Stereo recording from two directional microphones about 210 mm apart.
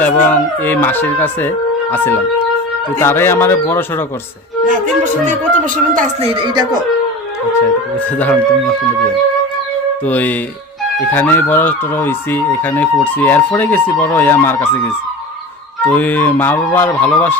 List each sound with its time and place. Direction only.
0.0 s speech: 10° left (ahead or behind)
5.2 s speech: 35° right (ahead or behind)
6.4 s speech: 20° right (ahead or behind)
8.2 s speech: 10° left (ahead or behind)
10.1 s speech: 5° left (ahead or behind)
15.9 s speech: 10° left (ahead or behind)